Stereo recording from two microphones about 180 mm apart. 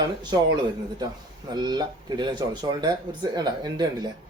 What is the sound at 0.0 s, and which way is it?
Speech, 25° right (ahead or behind).